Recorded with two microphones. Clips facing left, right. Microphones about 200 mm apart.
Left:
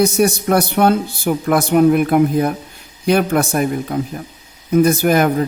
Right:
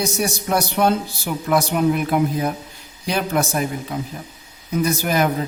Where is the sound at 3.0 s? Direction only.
55° left (ahead or behind).